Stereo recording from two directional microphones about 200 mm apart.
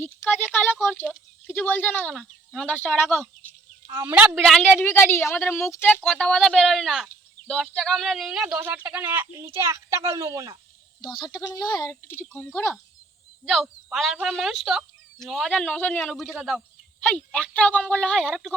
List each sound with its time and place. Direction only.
0.3 s speech: 10° left (ahead or behind)
3.9 s a woman's voice: 10° right (ahead or behind)
4.4 s speech: 5° left (ahead or behind); by 10.6 s 15° right (ahead or behind)
11.0 s speech: 25° left (ahead or behind); by 18.5 s centre (ahead or behind)